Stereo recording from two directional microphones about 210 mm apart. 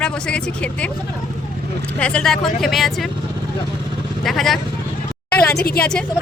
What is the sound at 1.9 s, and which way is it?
Speech, 5° left (ahead or behind).